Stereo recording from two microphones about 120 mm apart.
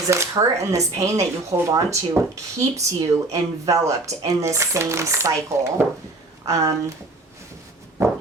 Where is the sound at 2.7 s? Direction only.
30° right (ahead or behind).